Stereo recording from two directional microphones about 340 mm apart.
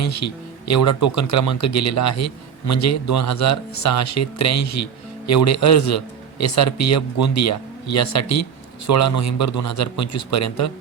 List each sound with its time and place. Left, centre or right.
0.0 s speech: left